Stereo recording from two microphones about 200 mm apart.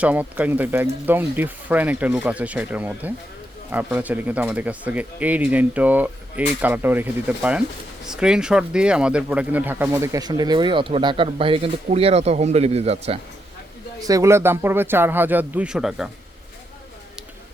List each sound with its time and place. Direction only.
0.0 s speech: 5° right (ahead or behind); by 13.1 s 30° right (ahead or behind)
14.1 s speech: 15° right (ahead or behind)